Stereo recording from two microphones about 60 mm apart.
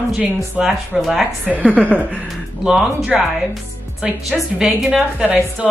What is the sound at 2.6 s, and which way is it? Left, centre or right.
A woman's voice, centre.